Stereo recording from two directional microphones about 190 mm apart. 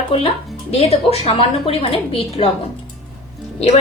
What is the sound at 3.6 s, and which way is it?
Speech, 35° left (ahead or behind).